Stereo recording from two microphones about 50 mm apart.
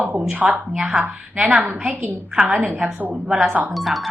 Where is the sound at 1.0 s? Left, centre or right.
Right.